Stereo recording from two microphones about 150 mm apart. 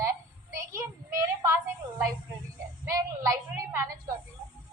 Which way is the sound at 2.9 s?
20° right (ahead or behind).